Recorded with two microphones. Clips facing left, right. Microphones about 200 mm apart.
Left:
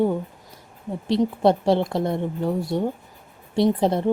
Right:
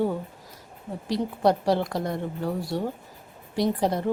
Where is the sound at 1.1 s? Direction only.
25° left (ahead or behind).